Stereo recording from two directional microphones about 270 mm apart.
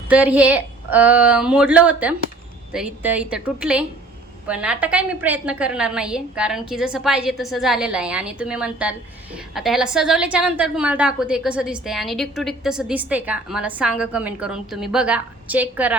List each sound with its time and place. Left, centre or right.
0.1 s a woman's voice: centre